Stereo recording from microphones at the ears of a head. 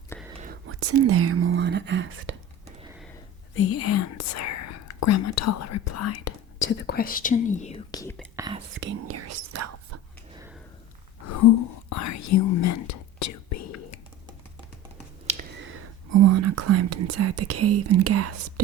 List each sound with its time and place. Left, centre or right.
0.4 s whispering: right
3.5 s whispering: left
8.6 s whispering: right
11.2 s whispering: left
15.5 s whispering: right